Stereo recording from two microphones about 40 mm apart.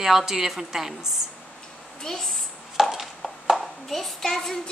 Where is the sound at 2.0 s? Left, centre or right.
Centre.